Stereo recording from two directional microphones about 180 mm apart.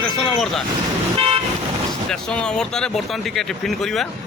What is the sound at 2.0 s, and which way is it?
Speech, 5° left (ahead or behind).